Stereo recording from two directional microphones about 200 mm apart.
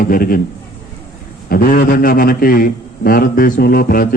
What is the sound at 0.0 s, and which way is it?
Speech, 45° left (ahead or behind).